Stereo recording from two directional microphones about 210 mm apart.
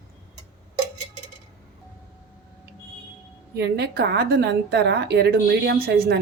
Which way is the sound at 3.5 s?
50° right (ahead or behind).